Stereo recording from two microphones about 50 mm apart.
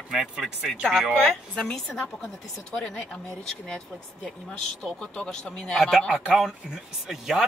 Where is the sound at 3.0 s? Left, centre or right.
Centre.